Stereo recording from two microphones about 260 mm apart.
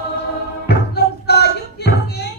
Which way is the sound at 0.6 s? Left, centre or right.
Left.